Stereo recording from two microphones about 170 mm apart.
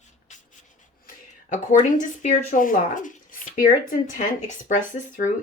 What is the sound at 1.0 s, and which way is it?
Speech, 50° left (ahead or behind).